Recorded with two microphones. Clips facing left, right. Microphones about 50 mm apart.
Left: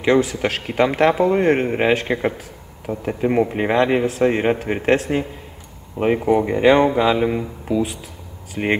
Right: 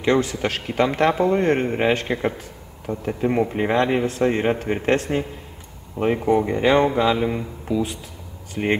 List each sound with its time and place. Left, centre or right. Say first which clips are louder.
0.0 s speech: left 3 dB; centre